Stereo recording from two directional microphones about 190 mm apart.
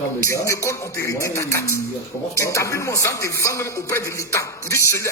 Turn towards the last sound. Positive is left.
turn(degrees=15)  # may be behind; listen again after turning